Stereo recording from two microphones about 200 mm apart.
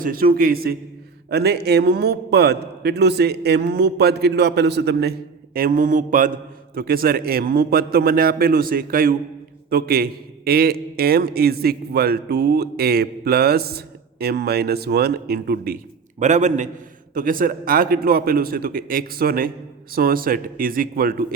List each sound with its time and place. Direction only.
0.0 s a man's voice: 45° right (ahead or behind)
16.2 s a man's voice: 35° right (ahead or behind)